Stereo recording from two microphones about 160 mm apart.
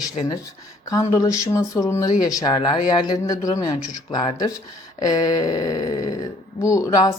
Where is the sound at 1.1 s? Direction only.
20° left (ahead or behind).